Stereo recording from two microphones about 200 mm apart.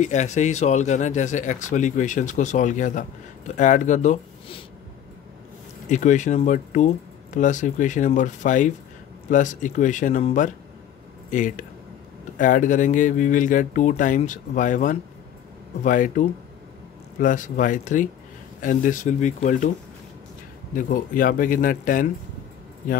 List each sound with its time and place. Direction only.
0.0 s speech: 35° left (ahead or behind)
5.9 s speech: 40° left (ahead or behind)
20.7 s speech: 45° left (ahead or behind)